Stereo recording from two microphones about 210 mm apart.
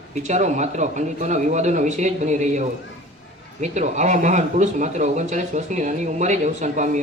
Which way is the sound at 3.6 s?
35° right (ahead or behind).